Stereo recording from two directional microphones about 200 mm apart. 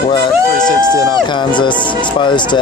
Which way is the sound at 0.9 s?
20° left (ahead or behind).